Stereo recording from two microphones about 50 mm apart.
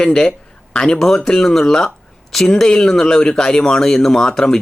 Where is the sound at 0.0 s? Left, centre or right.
Centre.